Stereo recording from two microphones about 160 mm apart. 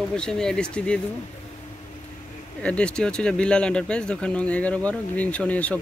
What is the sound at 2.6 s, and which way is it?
Speech, 5° left (ahead or behind).